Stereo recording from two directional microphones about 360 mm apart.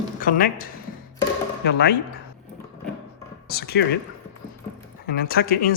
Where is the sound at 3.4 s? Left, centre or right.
Left.